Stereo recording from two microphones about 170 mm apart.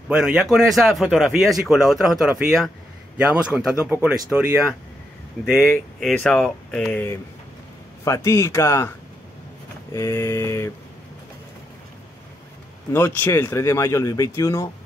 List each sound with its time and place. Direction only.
0.1 s speech: 5° right (ahead or behind)
5.4 s speech: 15° left (ahead or behind)
5.9 s speech: 5° left (ahead or behind)
9.9 s speech: 15° left (ahead or behind)
12.9 s speech: 15° left (ahead or behind)